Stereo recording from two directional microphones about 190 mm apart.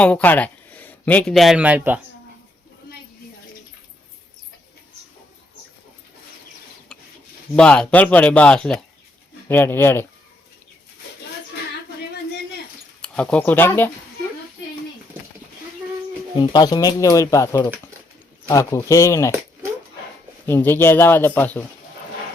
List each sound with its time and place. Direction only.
0.0 s a man's voice: 10° left (ahead or behind); by 2.0 s 10° right (ahead or behind)
7.5 s a man's voice: 5° left (ahead or behind)
13.0 s speech: 5° left (ahead or behind)
16.4 s a man's voice: 20° left (ahead or behind)
20.5 s a man's voice: 10° left (ahead or behind)